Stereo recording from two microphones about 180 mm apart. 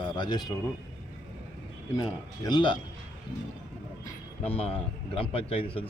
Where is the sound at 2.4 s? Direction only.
25° left (ahead or behind).